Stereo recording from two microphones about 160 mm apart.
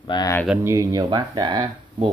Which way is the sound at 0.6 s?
20° right (ahead or behind).